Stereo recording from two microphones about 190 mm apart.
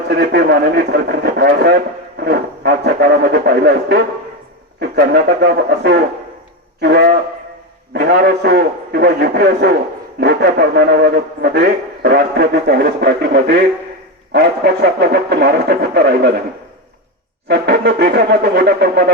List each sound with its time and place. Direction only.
0.1 s a man's voice: 60° right (ahead or behind)
17.5 s a man's voice: 60° right (ahead or behind)